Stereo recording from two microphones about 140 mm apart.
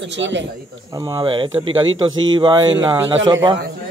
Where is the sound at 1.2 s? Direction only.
40° right (ahead or behind).